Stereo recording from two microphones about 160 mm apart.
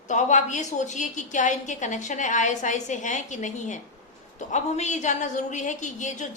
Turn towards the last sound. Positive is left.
turn(degrees=50)  # may be behind; listen again after turning